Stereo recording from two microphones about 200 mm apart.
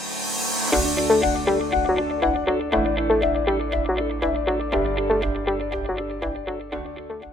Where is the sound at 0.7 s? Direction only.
Centre (ahead or behind).